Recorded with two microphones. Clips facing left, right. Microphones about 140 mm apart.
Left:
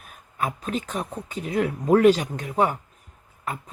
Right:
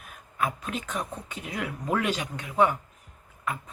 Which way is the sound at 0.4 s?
40° left (ahead or behind).